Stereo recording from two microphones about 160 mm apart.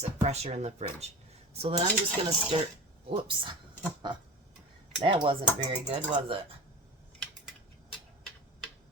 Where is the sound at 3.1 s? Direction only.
30° right (ahead or behind).